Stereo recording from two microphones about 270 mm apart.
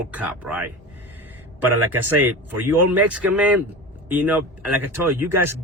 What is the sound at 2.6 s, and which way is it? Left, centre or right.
Speech, right.